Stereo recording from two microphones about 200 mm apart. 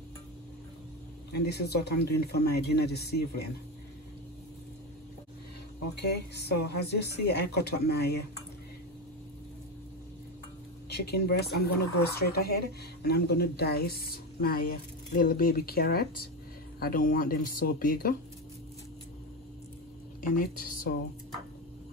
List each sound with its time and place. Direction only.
1.3 s speech: 55° left (ahead or behind)
5.9 s speech: 55° left (ahead or behind)
10.9 s speech: 55° left (ahead or behind)
20.2 s a woman's voice: 40° left (ahead or behind)